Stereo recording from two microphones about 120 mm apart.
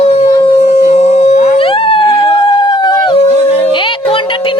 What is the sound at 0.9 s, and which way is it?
Howl, 65° left (ahead or behind).